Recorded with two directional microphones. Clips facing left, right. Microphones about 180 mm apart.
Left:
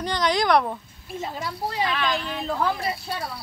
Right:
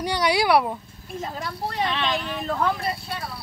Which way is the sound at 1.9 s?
20° right (ahead or behind).